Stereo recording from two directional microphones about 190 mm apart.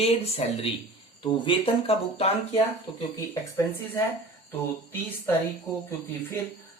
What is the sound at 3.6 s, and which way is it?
Speech, 15° left (ahead or behind).